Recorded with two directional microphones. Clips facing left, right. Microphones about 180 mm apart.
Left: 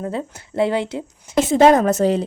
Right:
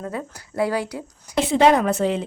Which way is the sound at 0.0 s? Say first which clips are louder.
Left 4 dB; 25° left (ahead or behind).